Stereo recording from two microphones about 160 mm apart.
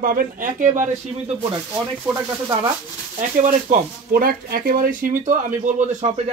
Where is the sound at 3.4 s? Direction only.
60° right (ahead or behind).